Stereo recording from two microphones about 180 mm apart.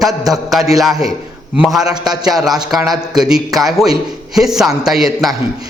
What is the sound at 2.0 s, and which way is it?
Speech, 20° right (ahead or behind).